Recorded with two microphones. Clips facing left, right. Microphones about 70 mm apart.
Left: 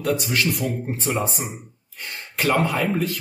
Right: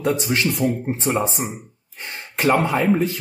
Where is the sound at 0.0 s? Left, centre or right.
Right.